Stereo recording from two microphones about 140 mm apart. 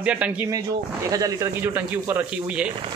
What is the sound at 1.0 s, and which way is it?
Speech, 25° right (ahead or behind).